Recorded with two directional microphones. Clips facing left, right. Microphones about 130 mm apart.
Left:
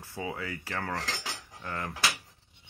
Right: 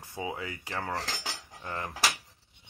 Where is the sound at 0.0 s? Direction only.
20° right (ahead or behind).